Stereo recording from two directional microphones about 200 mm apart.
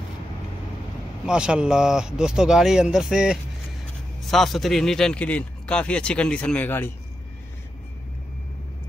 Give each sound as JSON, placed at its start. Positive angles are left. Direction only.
{"t": 1.2, "sound": "speech", "side_deg": -5}